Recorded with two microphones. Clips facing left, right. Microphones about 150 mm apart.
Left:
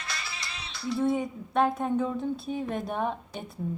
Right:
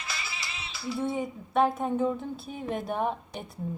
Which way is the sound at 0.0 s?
Centre (ahead or behind).